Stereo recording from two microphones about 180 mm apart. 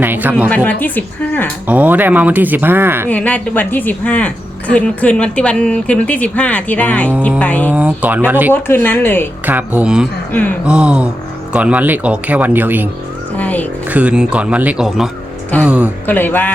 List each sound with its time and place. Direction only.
0.0 s speech: 10° right (ahead or behind)
0.4 s speech: 10° left (ahead or behind)
1.6 s speech: 10° right (ahead or behind)
3.1 s speech: 10° left (ahead or behind)
7.7 s speech: 10° right (ahead or behind)
8.5 s speech: 10° left (ahead or behind)
9.5 s speech: 10° right (ahead or behind)
13.3 s speech: 10° left (ahead or behind)
13.9 s speech: 5° right (ahead or behind)
16.0 s speech: 10° left (ahead or behind)